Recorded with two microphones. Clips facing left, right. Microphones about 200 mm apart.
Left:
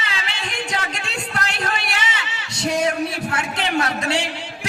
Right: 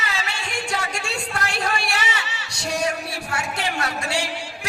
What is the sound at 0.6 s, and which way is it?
A man's voice, 20° left (ahead or behind).